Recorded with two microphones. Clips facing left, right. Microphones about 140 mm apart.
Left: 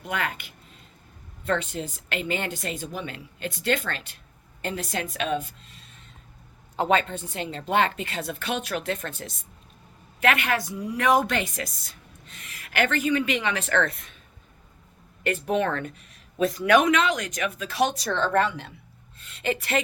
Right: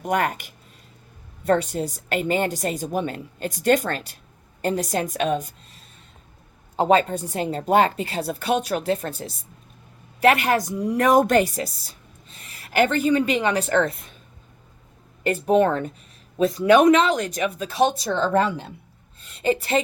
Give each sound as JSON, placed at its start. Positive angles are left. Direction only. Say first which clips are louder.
{"t": 0.0, "sound": "speech", "louder": "right 7 dB", "side_deg": -45}
{"t": 1.5, "sound": "a woman's voice", "louder": "right 6 dB", "side_deg": -40}
{"t": 15.2, "sound": "a woman's voice", "louder": "right 6 dB", "side_deg": -35}
{"t": 17.8, "sound": "speech", "louder": "right 6 dB", "side_deg": 0}
{"t": 19.3, "sound": "a woman's voice", "louder": "right 5 dB", "side_deg": -35}